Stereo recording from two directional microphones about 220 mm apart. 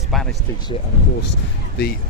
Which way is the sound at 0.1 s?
Centre (ahead or behind).